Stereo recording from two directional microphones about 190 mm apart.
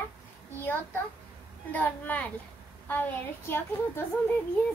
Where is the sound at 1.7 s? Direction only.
10° left (ahead or behind).